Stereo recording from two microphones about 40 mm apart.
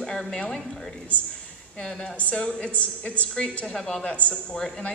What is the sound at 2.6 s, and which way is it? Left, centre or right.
Speech, left.